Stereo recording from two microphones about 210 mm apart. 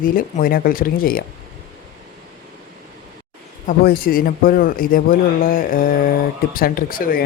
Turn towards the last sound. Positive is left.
turn(degrees=45)  # may be behind; listen again after turning